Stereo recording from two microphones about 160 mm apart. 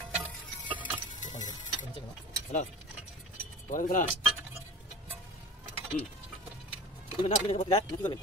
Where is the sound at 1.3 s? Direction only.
50° left (ahead or behind).